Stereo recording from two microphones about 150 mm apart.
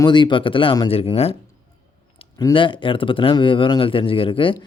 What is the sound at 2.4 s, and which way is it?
Speech, 30° left (ahead or behind).